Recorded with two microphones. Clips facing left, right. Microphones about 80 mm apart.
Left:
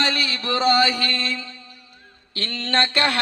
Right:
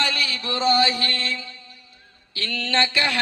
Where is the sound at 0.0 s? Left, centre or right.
Left.